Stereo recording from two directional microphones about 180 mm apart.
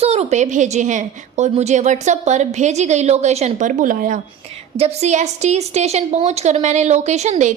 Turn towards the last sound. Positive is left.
turn(degrees=-40)  # may be behind; listen again after turning